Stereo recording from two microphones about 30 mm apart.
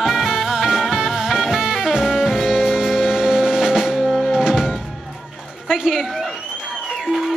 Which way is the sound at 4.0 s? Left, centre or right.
Centre.